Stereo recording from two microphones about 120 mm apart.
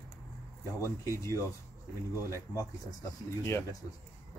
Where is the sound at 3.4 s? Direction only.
20° left (ahead or behind).